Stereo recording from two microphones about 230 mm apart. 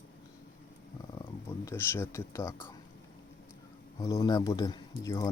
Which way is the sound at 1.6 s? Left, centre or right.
Centre.